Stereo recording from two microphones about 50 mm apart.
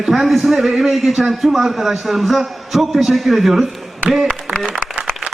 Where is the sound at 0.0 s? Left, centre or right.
Centre.